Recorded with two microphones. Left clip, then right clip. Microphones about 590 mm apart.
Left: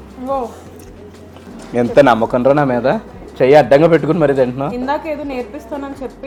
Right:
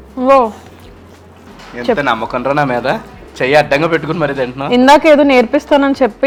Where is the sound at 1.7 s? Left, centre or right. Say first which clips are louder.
Left 4 dB; left.